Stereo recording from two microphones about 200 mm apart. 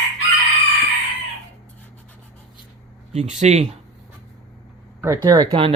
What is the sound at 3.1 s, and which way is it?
Speech, 35° right (ahead or behind).